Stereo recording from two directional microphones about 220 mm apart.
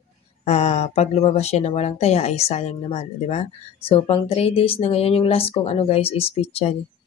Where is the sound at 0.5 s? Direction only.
30° left (ahead or behind).